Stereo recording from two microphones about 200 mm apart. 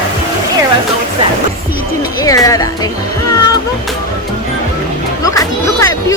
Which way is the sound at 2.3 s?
15° left (ahead or behind).